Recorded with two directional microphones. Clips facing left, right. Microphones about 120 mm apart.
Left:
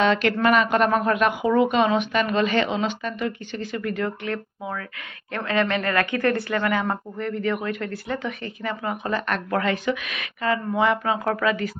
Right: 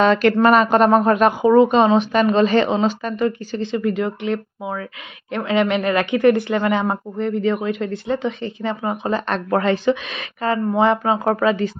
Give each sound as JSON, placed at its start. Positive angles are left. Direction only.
{"t": 0.0, "sound": "speech", "side_deg": -40}